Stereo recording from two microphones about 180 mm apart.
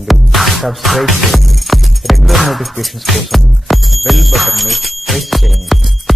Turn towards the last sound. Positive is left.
turn(degrees=0)  # may be behind; listen again after turning